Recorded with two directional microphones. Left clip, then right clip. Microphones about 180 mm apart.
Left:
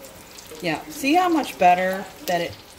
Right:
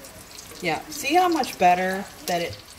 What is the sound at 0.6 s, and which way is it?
Speech, 25° left (ahead or behind).